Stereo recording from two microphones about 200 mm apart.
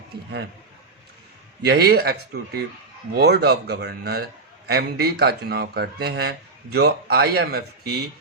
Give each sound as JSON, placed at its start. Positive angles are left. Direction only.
{"t": 1.6, "sound": "a man's voice", "side_deg": -55}